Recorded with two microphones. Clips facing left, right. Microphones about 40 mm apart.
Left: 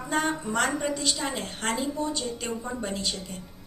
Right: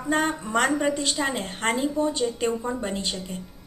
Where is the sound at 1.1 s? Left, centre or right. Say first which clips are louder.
Right 4 dB; right.